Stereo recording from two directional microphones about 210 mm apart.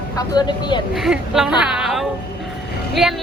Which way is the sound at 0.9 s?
Centre (ahead or behind).